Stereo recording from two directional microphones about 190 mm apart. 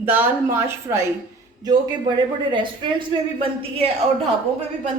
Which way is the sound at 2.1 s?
25° right (ahead or behind).